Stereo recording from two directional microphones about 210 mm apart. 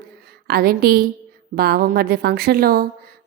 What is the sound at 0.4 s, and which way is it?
A woman's voice, 45° right (ahead or behind).